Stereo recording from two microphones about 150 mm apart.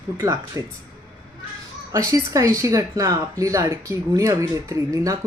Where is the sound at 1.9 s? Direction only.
20° right (ahead or behind).